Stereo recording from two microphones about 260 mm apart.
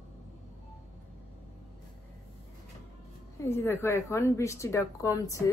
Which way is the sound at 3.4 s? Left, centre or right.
Centre.